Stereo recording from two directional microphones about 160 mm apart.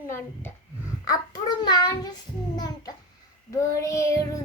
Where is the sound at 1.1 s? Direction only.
25° left (ahead or behind).